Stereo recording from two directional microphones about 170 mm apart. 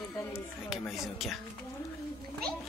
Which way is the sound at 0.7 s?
Centre (ahead or behind).